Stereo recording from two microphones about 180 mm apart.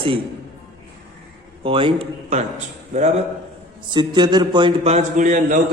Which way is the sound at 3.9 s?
25° right (ahead or behind).